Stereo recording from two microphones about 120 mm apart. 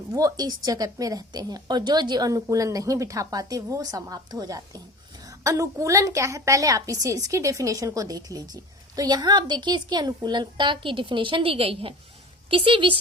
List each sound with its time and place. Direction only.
0.1 s a woman's voice: 30° right (ahead or behind); by 13.0 s 45° right (ahead or behind)